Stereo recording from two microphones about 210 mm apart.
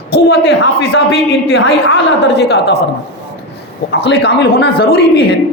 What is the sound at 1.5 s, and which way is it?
A man's voice, 65° left (ahead or behind).